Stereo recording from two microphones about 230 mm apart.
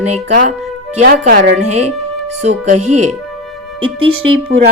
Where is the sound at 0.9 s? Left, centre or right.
Right.